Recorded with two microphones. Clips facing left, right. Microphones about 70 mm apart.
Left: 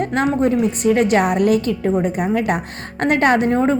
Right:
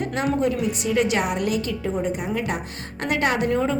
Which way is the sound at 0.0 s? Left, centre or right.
Left.